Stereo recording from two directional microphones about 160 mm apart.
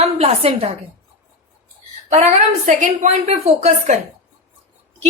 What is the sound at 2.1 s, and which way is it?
A woman's voice, 50° right (ahead or behind).